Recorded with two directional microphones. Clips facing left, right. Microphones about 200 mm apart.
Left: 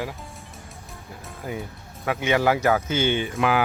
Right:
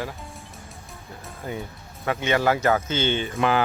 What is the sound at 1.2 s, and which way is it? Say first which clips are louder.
Speech: even; 5° left (ahead or behind).